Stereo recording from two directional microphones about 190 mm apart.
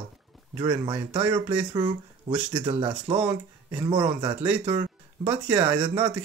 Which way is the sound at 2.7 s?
30° right (ahead or behind).